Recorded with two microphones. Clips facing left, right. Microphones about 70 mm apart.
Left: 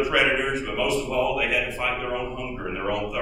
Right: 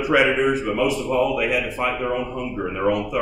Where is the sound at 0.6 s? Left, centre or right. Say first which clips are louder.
Right 4 dB; right.